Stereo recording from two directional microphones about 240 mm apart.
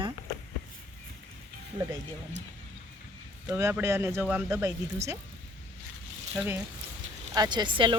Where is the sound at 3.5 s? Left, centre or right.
Centre.